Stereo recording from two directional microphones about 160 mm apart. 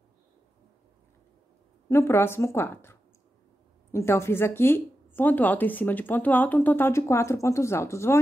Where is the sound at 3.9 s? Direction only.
15° left (ahead or behind).